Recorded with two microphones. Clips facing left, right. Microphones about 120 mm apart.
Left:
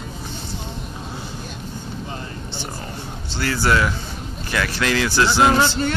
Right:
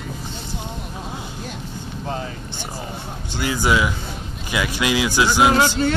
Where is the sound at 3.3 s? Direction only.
15° right (ahead or behind).